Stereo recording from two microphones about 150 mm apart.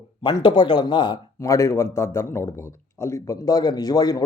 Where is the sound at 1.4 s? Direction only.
20° left (ahead or behind).